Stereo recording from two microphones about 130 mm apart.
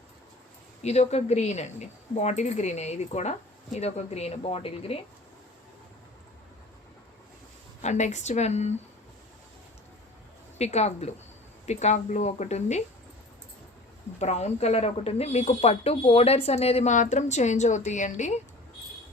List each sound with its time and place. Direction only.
0.8 s speech: 55° left (ahead or behind)
7.8 s speech: 60° left (ahead or behind)
10.6 s speech: 55° left (ahead or behind)
14.2 s speech: 55° left (ahead or behind)